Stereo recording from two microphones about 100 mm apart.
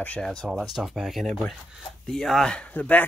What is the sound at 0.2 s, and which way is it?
Speech, 5° left (ahead or behind).